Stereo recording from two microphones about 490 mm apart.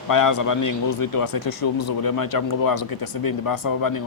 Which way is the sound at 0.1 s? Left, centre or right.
Left.